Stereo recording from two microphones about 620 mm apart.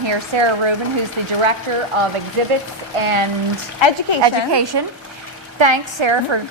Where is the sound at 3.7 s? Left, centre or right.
Left.